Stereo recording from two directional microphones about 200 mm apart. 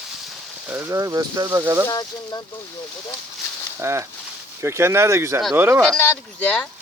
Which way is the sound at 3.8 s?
15° right (ahead or behind).